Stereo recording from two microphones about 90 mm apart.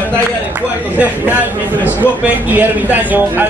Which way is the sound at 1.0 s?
20° right (ahead or behind).